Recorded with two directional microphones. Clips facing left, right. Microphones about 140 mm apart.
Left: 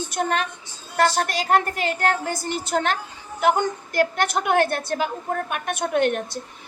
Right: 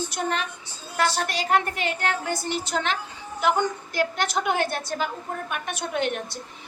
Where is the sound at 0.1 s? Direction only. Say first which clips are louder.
Left 4 dB; 50° left (ahead or behind).